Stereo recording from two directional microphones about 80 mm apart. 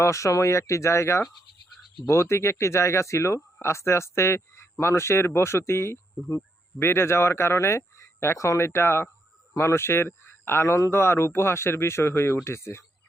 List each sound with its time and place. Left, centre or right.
0.0 s speech: left